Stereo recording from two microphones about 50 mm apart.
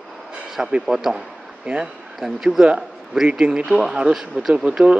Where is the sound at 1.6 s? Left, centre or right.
Right.